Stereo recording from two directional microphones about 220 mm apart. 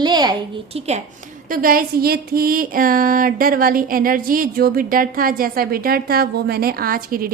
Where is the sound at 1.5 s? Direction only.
40° right (ahead or behind).